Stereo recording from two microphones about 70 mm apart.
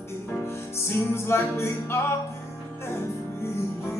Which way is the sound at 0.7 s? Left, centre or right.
Left.